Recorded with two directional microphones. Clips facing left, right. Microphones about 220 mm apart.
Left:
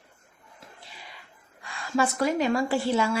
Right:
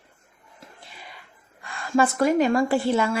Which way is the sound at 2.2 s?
50° right (ahead or behind).